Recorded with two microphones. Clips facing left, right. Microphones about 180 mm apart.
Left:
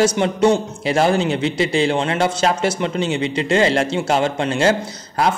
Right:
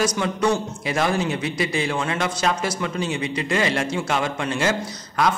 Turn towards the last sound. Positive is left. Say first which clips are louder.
# left 2 dB
turn(degrees=30)  # may be behind; listen again after turning